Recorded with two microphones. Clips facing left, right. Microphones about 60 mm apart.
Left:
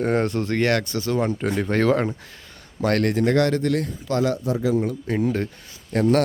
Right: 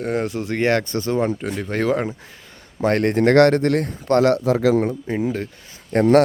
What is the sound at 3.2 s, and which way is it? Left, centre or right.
Speech, right.